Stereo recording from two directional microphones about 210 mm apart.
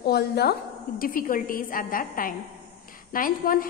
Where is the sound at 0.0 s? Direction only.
50° left (ahead or behind).